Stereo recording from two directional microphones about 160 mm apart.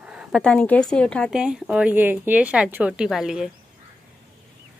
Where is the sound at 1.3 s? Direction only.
5° right (ahead or behind).